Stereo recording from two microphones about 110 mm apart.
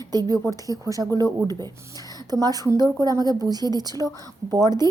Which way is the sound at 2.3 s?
35° right (ahead or behind).